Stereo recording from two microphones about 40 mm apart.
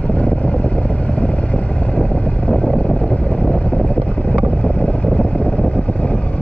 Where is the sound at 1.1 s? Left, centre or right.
Left.